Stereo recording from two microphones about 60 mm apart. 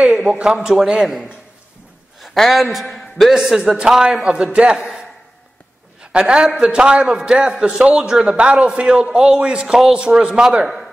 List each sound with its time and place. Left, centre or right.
0.0 s a man's voice: centre
2.1 s a man's voice: centre
4.7 s speech: centre
6.1 s a man's voice: centre